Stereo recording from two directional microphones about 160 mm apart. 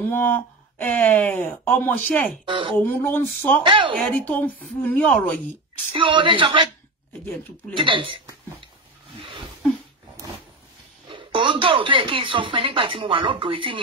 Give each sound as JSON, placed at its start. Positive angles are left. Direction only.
{"t": 0.1, "sound": "speech", "side_deg": 10}
{"t": 2.4, "sound": "speech", "side_deg": -30}
{"t": 2.7, "sound": "speech", "side_deg": 10}
{"t": 3.6, "sound": "speech", "side_deg": -30}
{"t": 4.0, "sound": "speech", "side_deg": 10}
{"t": 5.9, "sound": "speech", "side_deg": -30}
{"t": 7.7, "sound": "speech", "side_deg": -30}
{"t": 9.2, "sound": "a sound", "side_deg": -30}
{"t": 11.1, "sound": "speech", "side_deg": -30}